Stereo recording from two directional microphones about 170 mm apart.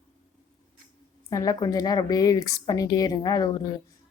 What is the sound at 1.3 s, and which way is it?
A woman's voice, 20° left (ahead or behind).